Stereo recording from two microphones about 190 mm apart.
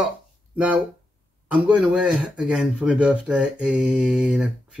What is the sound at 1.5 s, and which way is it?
Speech, 5° right (ahead or behind).